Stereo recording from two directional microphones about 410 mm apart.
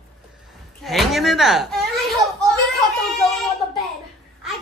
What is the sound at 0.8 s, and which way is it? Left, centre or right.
Speech, centre.